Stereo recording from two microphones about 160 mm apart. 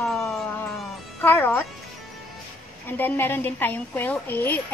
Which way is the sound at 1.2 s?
10° left (ahead or behind).